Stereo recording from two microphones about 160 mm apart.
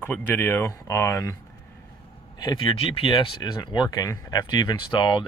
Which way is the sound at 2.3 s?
25° left (ahead or behind).